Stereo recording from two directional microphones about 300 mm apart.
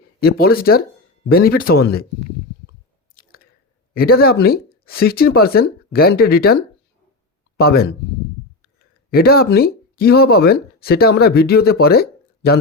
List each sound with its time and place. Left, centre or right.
0.2 s speech: left
3.2 s chewing: left
3.9 s speech: left
9.0 s speech: left